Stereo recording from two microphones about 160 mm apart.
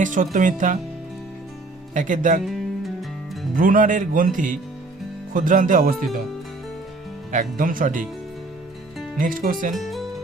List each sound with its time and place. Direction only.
0.0 s speech: 55° right (ahead or behind)
1.9 s speech: 50° right (ahead or behind)
2.4 s music: centre (ahead or behind)
3.5 s speech: 60° right (ahead or behind)
7.3 s speech: 55° right (ahead or behind)
9.1 s speech: 60° right (ahead or behind)
9.7 s music: centre (ahead or behind)